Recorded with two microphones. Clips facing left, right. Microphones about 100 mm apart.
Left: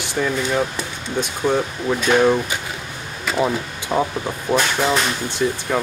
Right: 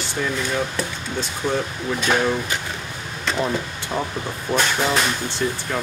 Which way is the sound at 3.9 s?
20° left (ahead or behind).